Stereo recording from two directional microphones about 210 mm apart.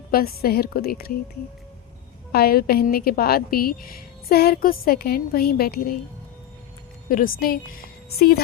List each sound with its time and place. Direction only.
0.1 s a woman's voice: 45° left (ahead or behind)
2.3 s a woman's voice: 45° left (ahead or behind)
7.1 s a woman's voice: 40° left (ahead or behind)